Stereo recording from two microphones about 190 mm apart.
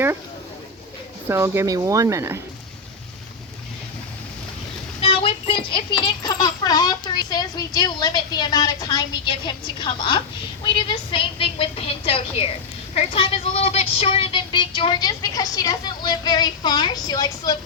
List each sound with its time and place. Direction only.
1.3 s speech: 15° right (ahead or behind)
4.9 s speech: 30° left (ahead or behind)